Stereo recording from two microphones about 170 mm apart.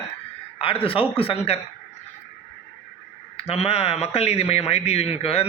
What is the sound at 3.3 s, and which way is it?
A man's voice, 35° left (ahead or behind).